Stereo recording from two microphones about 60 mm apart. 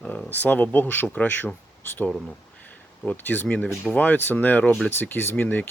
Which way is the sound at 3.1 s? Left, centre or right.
Left.